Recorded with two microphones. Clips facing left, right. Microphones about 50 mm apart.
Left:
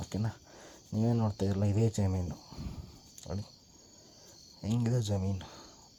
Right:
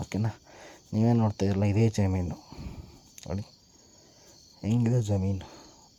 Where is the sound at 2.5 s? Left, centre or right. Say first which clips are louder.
Right 1 dB; right.